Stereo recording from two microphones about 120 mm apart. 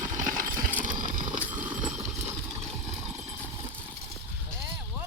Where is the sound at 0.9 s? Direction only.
90° right.